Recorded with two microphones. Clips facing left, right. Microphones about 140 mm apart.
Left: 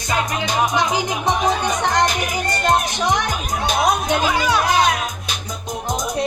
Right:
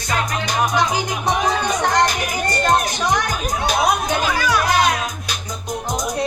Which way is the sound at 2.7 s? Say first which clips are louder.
Left 1 dB; 25° left (ahead or behind).